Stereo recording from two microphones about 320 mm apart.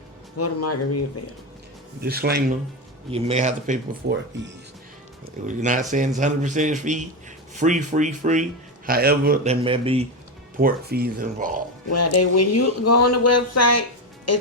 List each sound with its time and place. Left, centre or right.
0.3 s speech: left
2.0 s a man's voice: right
3.1 s a man's voice: centre
4.1 s speech: right
5.5 s a man's voice: right
10.6 s a man's voice: right
11.9 s speech: left